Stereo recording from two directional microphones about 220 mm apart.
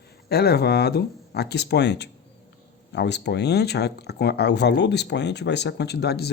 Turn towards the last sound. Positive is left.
turn(degrees=45)  # may be behind; listen again after turning